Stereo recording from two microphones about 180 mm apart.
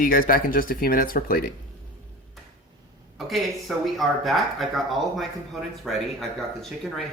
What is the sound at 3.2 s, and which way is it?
Speech, centre (ahead or behind).